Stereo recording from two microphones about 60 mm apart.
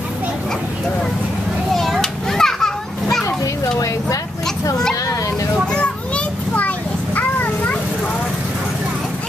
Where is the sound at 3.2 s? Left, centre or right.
Left.